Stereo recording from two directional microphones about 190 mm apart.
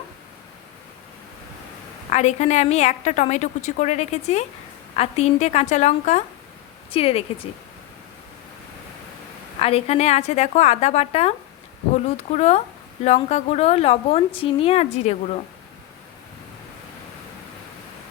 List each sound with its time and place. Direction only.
2.0 s a woman's voice: 35° left (ahead or behind)
9.6 s a woman's voice: 30° left (ahead or behind)